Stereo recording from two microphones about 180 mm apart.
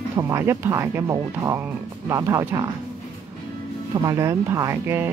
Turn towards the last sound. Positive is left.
turn(degrees=-15)  # may be behind; listen again after turning